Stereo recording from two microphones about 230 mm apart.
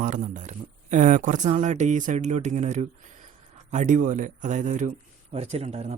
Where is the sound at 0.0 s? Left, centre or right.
Right.